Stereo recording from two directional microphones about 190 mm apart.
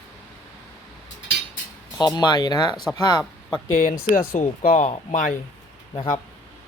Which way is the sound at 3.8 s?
45° left (ahead or behind).